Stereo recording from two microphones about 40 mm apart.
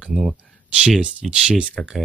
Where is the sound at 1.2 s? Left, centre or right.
Centre.